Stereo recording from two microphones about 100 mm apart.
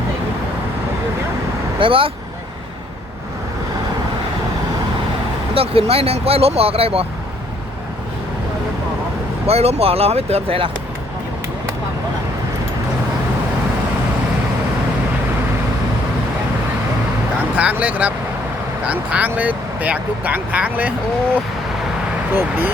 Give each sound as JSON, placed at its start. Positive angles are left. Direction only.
{"t": 1.8, "sound": "speech", "side_deg": -65}
{"t": 5.5, "sound": "speech", "side_deg": -75}
{"t": 9.5, "sound": "speech", "side_deg": -90}
{"t": 17.6, "sound": "speech", "side_deg": -15}
{"t": 22.4, "sound": "speech", "side_deg": -20}